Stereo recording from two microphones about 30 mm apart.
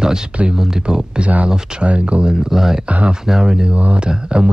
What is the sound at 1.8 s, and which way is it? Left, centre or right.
Speech, right.